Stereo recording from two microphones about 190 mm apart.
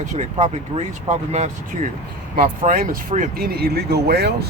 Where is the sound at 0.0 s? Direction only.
40° right (ahead or behind).